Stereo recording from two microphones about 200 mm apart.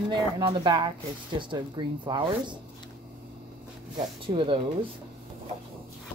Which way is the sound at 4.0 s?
25° right (ahead or behind).